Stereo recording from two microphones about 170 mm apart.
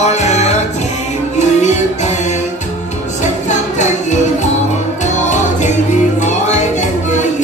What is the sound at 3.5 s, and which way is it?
Music, 45° left (ahead or behind).